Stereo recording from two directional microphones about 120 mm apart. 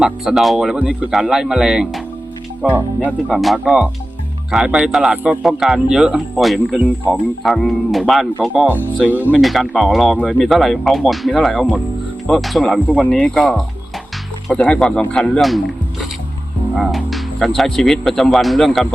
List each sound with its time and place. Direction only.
0.0 s speech: 5° right (ahead or behind)
3.2 s speech: centre (ahead or behind)
8.4 s speech: 10° right (ahead or behind)
9.4 s speech: centre (ahead or behind)